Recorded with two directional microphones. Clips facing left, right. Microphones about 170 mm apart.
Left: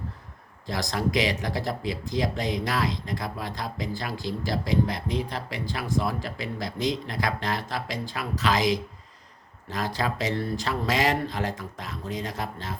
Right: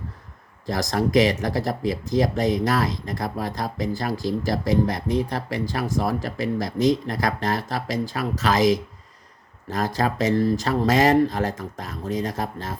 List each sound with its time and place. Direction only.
0.7 s speech: 45° right (ahead or behind)